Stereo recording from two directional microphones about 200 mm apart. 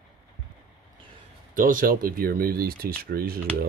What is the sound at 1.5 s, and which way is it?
Speech, 45° right (ahead or behind).